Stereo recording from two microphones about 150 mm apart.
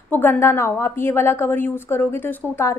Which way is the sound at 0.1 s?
15° left (ahead or behind).